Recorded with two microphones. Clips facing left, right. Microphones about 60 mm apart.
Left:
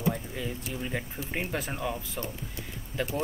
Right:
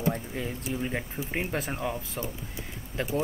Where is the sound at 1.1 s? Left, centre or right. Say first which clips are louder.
Right 2 dB; centre.